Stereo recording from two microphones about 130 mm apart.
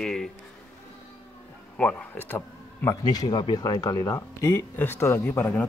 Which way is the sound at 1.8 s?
10° left (ahead or behind).